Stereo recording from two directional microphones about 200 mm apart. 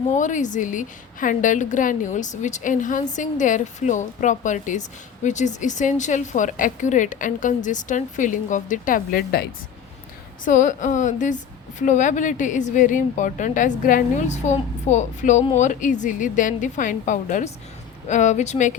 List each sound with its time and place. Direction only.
0.1 s a woman's voice: 40° left (ahead or behind)